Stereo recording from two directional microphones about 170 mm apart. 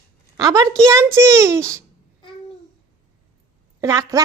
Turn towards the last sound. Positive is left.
turn(degrees=-20)  # may be behind; listen again after turning